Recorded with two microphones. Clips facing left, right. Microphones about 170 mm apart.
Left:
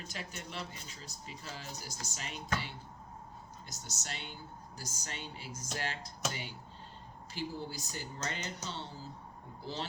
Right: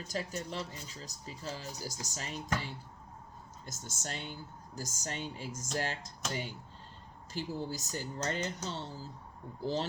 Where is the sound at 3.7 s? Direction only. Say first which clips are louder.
Right 4 dB; 45° right (ahead or behind).